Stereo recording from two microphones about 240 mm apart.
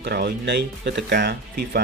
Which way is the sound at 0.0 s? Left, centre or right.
Right.